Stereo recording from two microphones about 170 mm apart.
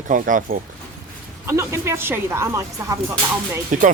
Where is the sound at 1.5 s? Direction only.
15° right (ahead or behind).